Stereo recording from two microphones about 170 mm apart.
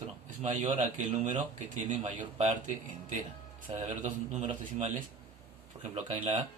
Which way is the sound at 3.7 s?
40° right (ahead or behind).